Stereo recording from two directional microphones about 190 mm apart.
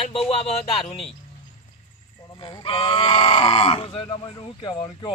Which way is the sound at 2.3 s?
25° left (ahead or behind).